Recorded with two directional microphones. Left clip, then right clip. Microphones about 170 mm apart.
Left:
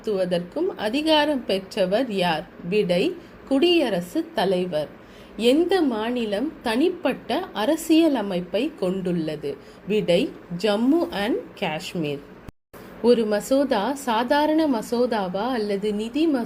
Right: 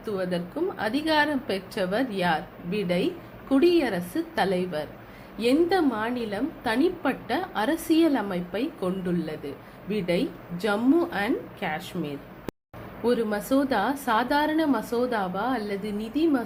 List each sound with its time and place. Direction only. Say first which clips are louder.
0.0 s a woman's voice: left 6 dB; 40° left (ahead or behind)
5.4 s a woman's voice: left 3 dB; 40° left (ahead or behind)